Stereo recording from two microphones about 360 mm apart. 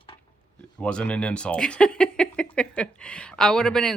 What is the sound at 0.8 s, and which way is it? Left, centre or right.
Speech, centre.